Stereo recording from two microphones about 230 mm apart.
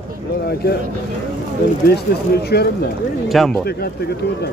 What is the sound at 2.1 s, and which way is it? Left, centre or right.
Speech, left.